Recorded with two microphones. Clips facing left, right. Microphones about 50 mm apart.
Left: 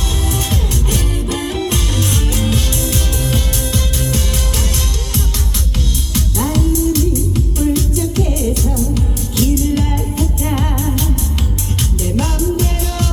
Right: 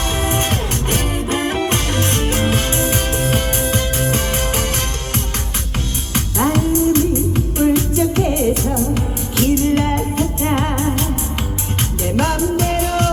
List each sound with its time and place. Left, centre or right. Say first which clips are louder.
0.2 s music: right 1 dB; right
6.1 s music: right 1 dB; right
12.0 s music: right 2 dB; right